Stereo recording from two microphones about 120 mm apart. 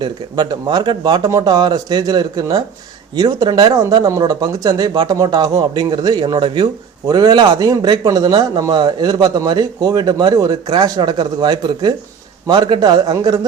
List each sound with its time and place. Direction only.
0.0 s speech: 40° right (ahead or behind)